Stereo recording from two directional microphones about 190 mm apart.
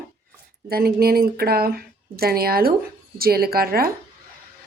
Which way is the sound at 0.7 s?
55° right (ahead or behind).